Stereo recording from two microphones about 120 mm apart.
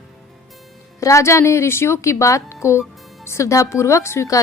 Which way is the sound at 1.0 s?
25° left (ahead or behind).